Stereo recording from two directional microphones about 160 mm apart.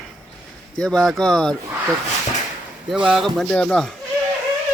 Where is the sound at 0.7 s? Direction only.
5° left (ahead or behind).